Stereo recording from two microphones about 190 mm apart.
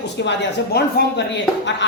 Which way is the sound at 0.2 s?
60° left (ahead or behind).